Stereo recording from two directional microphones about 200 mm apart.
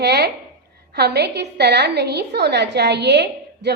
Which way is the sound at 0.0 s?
55° right (ahead or behind).